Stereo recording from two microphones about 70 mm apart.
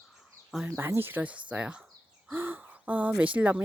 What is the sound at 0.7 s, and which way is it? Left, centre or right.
Speech, right.